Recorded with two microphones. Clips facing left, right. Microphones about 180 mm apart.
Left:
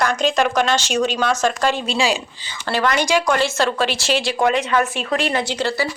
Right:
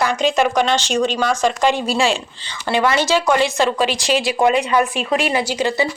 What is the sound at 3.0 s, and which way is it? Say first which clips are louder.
Speech: right 1 dB; 15° left (ahead or behind).